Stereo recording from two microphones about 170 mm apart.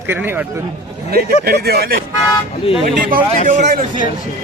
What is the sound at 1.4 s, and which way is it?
Speech, 65° right (ahead or behind).